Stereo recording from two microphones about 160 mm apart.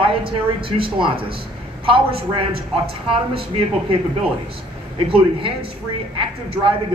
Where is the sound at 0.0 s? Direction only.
35° right (ahead or behind).